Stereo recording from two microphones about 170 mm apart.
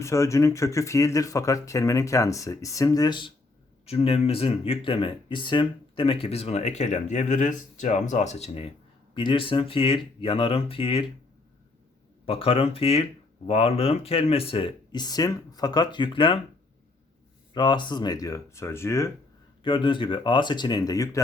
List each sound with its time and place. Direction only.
0.0 s speech: 15° left (ahead or behind); by 8.6 s 40° left (ahead or behind)
9.1 s speech: 30° left (ahead or behind)
12.2 s speech: 35° left (ahead or behind)
17.5 s speech: 25° left (ahead or behind)
19.6 s speech: 30° left (ahead or behind)